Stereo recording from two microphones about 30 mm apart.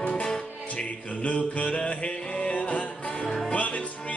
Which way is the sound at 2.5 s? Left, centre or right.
Left.